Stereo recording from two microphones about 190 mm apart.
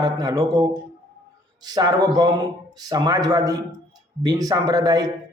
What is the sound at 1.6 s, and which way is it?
Speech, 20° right (ahead or behind).